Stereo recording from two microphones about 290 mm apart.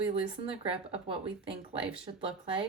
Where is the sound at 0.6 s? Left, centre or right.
Centre.